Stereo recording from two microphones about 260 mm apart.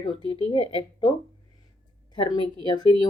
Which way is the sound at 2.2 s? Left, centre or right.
Centre.